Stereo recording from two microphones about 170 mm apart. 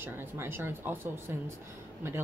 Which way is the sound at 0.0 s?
10° right (ahead or behind).